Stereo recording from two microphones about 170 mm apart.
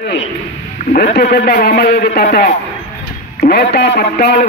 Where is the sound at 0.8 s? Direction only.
50° left (ahead or behind).